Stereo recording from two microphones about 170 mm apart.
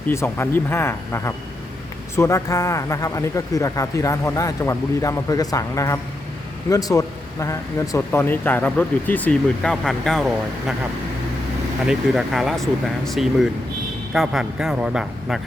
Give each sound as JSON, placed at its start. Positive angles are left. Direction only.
{"t": 0.1, "sound": "speech", "side_deg": 15}
{"t": 11.9, "sound": "speech", "side_deg": 0}